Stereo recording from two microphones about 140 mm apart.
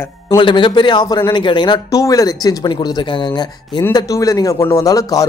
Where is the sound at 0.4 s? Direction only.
35° left (ahead or behind).